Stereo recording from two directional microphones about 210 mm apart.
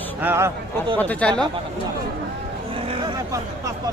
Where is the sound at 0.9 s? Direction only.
10° left (ahead or behind).